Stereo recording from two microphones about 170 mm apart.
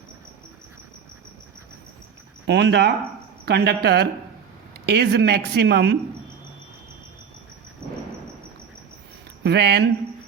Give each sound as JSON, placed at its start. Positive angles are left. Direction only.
{"t": 2.5, "sound": "speech", "side_deg": -90}
{"t": 3.4, "sound": "a woman's voice", "side_deg": -75}
{"t": 9.4, "sound": "speech", "side_deg": -80}